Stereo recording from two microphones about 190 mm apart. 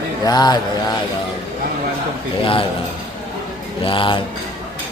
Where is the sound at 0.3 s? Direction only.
20° left (ahead or behind).